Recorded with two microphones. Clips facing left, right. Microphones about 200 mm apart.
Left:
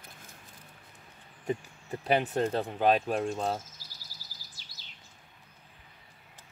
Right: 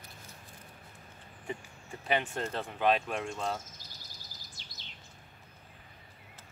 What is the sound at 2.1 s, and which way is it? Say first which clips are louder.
Speech: left 5 dB; 40° left (ahead or behind).